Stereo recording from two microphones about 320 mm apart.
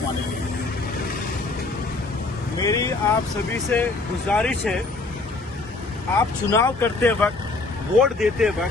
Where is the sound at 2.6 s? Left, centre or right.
Centre.